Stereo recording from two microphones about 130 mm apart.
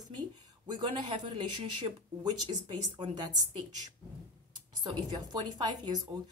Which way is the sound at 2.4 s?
35° right (ahead or behind).